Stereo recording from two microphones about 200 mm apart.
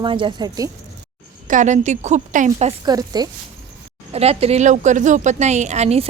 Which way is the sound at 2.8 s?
20° right (ahead or behind).